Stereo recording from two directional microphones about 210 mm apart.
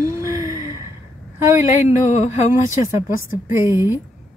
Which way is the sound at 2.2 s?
35° left (ahead or behind).